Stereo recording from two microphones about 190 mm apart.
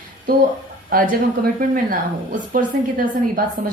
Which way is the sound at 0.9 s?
45° right (ahead or behind).